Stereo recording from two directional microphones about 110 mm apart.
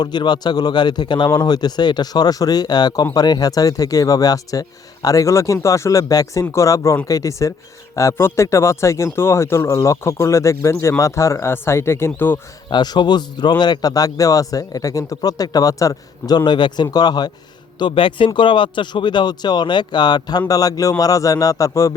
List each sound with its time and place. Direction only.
0.0 s a man's voice: 40° left (ahead or behind); by 12.4 s 20° left (ahead or behind)
12.7 s a man's voice: 40° left (ahead or behind)